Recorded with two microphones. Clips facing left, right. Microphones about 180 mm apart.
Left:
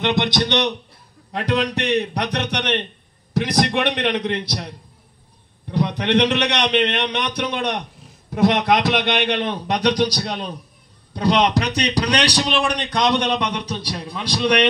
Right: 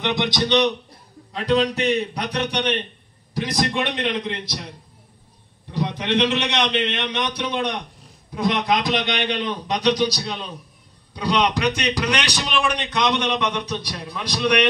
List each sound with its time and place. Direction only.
0.0 s a man's voice: 65° left (ahead or behind)
2.0 s a man's voice: 70° left (ahead or behind)
5.7 s a man's voice: 65° left (ahead or behind)
8.5 s a man's voice: 75° left (ahead or behind); by 11.6 s 45° left (ahead or behind)
11.7 s a man's voice: 35° left (ahead or behind)